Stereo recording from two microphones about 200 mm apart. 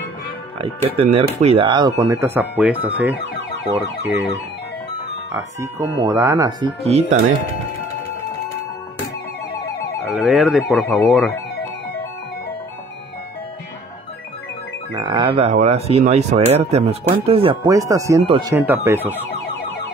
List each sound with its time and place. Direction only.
0.6 s speech: 30° right (ahead or behind)
2.1 s speech: 10° right (ahead or behind)
5.3 s speech: 15° right (ahead or behind)
6.8 s speech: 30° right (ahead or behind)
10.0 s speech: centre (ahead or behind)
15.0 s speech: 20° right (ahead or behind)
18.2 s speech: 25° right (ahead or behind)
18.5 s speech: 10° right (ahead or behind)